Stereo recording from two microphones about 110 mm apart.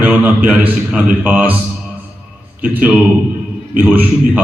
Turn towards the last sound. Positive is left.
turn(degrees=-15)  # may be behind; listen again after turning